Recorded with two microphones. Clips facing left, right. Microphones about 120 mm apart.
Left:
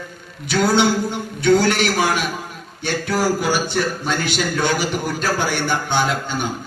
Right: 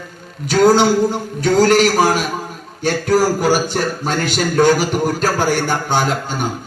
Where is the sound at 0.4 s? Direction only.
45° right (ahead or behind).